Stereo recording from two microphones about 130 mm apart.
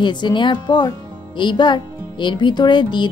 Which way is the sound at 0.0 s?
35° left (ahead or behind).